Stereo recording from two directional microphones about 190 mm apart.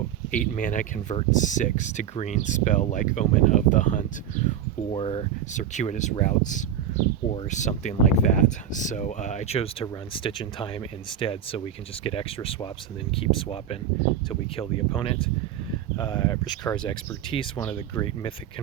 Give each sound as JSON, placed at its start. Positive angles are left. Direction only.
{"t": 0.3, "sound": "speech", "side_deg": 45}
{"t": 4.9, "sound": "speech", "side_deg": 30}